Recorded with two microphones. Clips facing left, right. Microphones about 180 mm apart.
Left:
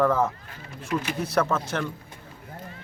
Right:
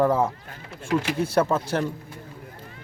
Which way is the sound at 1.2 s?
30° right (ahead or behind).